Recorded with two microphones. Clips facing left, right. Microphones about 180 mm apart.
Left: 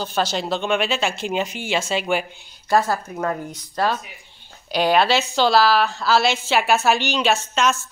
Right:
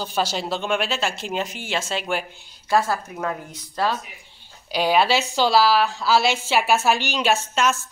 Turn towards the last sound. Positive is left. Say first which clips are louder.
# left 1 dB
turn(degrees=-10)  # may be behind; listen again after turning